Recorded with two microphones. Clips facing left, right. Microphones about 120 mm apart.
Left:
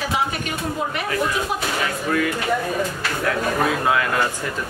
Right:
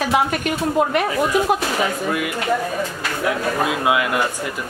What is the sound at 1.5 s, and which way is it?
Speech, 60° right (ahead or behind).